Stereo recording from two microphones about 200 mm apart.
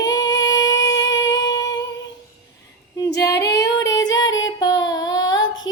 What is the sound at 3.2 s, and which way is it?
Female singing, 15° left (ahead or behind).